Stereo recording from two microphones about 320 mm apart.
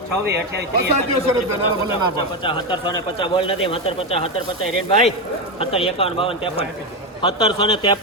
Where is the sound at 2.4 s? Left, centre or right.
Centre.